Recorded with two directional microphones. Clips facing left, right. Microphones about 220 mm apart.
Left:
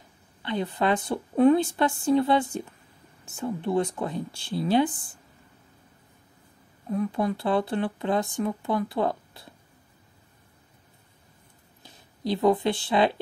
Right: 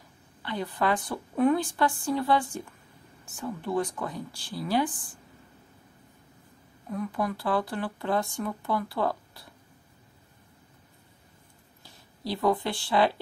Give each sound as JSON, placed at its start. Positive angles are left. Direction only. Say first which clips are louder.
{"t": 0.4, "sound": "speech", "louder": "left 3 dB", "side_deg": 20}
{"t": 6.9, "sound": "speech", "louder": "left 4 dB", "side_deg": 25}
{"t": 11.8, "sound": "speech", "louder": "left 5 dB", "side_deg": 20}